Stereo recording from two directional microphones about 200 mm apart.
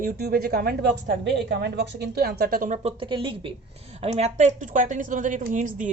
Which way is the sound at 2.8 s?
30° right (ahead or behind).